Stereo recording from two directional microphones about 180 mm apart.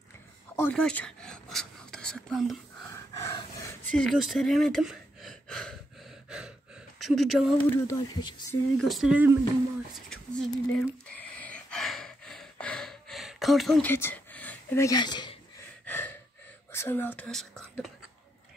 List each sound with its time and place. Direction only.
0.6 s speech: 5° left (ahead or behind)
2.9 s a sound: 20° left (ahead or behind)
3.9 s speech: centre (ahead or behind)
7.0 s speech: centre (ahead or behind)
7.7 s speech: 20° left (ahead or behind)
8.7 s speech: centre (ahead or behind)
9.9 s gasp: 5° left (ahead or behind); by 15.3 s 25° left (ahead or behind)
15.8 s gasp: 10° left (ahead or behind)
16.7 s speech: 10° left (ahead or behind)